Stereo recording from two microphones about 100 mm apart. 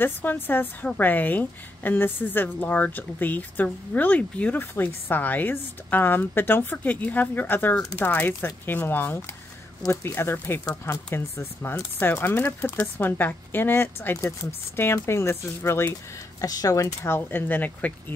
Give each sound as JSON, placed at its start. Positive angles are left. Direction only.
{"t": 0.0, "sound": "a woman's voice", "side_deg": 20}
{"t": 10.6, "sound": "speech", "side_deg": 40}
{"t": 11.1, "sound": "speech", "side_deg": 20}
{"t": 16.3, "sound": "speech", "side_deg": 40}